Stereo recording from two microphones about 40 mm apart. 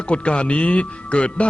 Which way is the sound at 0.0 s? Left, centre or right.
Left.